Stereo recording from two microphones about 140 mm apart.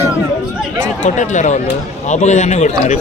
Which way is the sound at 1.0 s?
60° left (ahead or behind).